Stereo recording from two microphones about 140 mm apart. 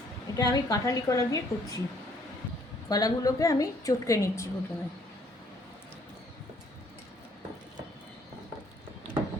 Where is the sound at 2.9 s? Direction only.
25° left (ahead or behind).